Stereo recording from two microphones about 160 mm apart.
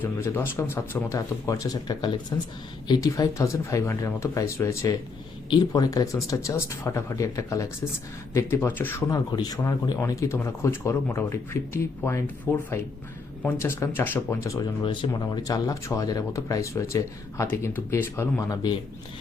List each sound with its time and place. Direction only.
0.0 s speech: 15° left (ahead or behind)